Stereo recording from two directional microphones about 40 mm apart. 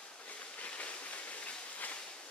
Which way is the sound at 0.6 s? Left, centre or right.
Left.